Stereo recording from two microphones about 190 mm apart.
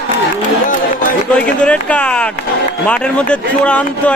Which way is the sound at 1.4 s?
5° left (ahead or behind).